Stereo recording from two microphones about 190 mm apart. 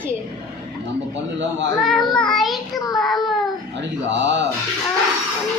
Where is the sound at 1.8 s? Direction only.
Centre (ahead or behind).